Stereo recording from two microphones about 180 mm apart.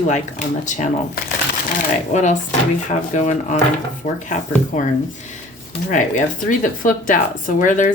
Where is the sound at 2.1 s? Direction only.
40° left (ahead or behind).